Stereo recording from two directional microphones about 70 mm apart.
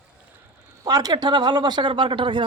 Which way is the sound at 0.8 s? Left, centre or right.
Right.